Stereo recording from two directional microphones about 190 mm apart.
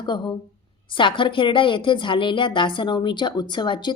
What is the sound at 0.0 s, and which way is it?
A woman's voice, 25° left (ahead or behind).